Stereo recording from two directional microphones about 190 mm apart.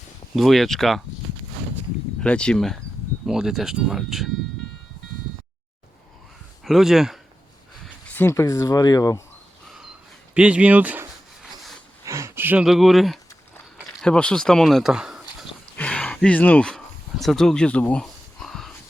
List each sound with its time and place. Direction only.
0.3 s speech: centre (ahead or behind)
2.2 s speech: 5° left (ahead or behind)
6.7 s speech: centre (ahead or behind)
8.1 s speech: 10° left (ahead or behind)
10.3 s speech: 5° right (ahead or behind)
12.0 s a sound: 15° right (ahead or behind); by 13.1 s centre (ahead or behind)
14.0 s speech: 5° left (ahead or behind)
15.8 s a sound: 5° left (ahead or behind)